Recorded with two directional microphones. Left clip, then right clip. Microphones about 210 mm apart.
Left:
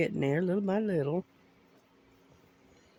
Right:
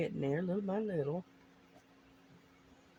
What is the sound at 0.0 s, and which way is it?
Speech, 55° left (ahead or behind).